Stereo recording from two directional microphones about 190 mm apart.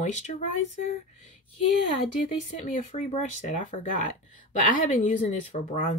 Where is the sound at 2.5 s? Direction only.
45° left (ahead or behind).